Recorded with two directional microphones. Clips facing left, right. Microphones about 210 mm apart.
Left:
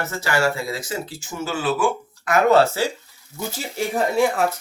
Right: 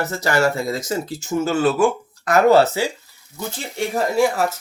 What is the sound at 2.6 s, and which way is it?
Speech, 20° right (ahead or behind).